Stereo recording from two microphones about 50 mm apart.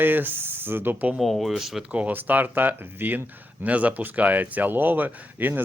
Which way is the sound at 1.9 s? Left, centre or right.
Right.